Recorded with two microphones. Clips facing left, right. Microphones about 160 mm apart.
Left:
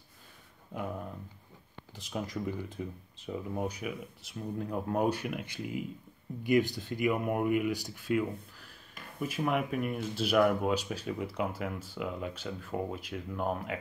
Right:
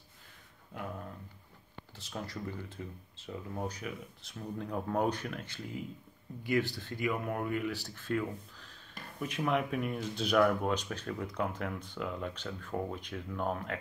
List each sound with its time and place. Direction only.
0.7 s speech: 15° left (ahead or behind)